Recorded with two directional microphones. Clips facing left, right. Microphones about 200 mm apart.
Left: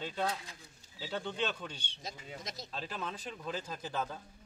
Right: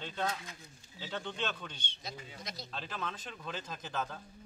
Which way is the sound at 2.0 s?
45° left (ahead or behind).